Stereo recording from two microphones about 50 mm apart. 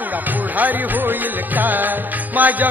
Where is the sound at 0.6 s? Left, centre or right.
Right.